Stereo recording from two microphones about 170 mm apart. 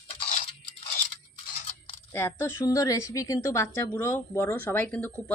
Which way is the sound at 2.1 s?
15° left (ahead or behind).